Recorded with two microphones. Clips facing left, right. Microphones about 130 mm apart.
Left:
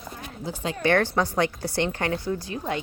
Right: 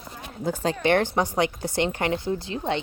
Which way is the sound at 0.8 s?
20° right (ahead or behind).